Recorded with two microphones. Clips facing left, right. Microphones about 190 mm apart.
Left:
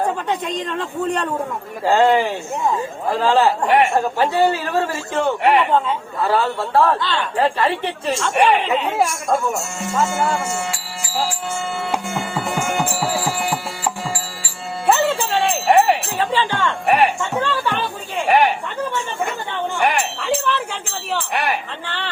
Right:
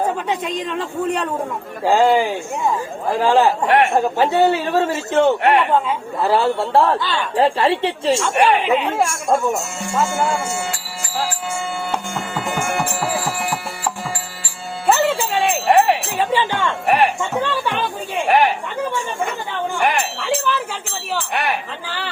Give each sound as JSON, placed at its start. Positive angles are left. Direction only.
{"t": 0.0, "sound": "a man's voice", "side_deg": -5}
{"t": 3.7, "sound": "a man's voice", "side_deg": 0}
{"t": 3.9, "sound": "a man's voice", "side_deg": -20}
{"t": 5.4, "sound": "a man's voice", "side_deg": 0}
{"t": 6.1, "sound": "a man's voice", "side_deg": -25}
{"t": 8.2, "sound": "a man's voice", "side_deg": -5}
{"t": 9.5, "sound": "speech", "side_deg": -10}
{"t": 11.9, "sound": "music", "side_deg": 5}
{"t": 14.8, "sound": "jingle bell", "side_deg": -5}
{"t": 16.1, "sound": "music", "side_deg": -15}
{"t": 16.8, "sound": "music", "side_deg": 0}
{"t": 18.3, "sound": "a sound", "side_deg": 0}
{"t": 19.8, "sound": "jingle bell", "side_deg": 0}
{"t": 21.1, "sound": "a man's voice", "side_deg": 0}